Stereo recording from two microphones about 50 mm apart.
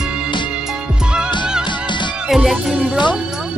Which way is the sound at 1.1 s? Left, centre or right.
Centre.